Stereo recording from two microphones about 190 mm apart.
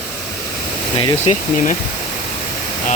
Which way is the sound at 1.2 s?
40° left (ahead or behind).